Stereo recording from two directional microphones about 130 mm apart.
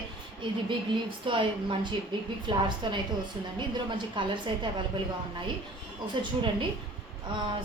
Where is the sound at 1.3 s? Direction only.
40° right (ahead or behind).